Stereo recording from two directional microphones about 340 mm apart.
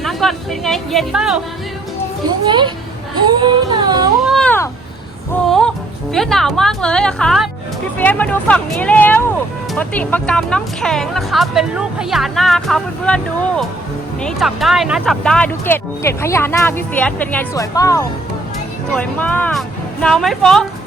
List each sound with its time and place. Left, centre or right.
0.0 s speech: centre
2.5 s singing: centre
4.2 s cat: centre
5.3 s music: centre
6.1 s speech: centre